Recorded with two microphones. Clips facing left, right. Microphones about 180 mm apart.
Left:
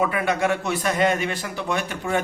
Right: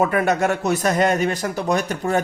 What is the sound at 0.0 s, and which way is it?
A man's voice, 45° right (ahead or behind).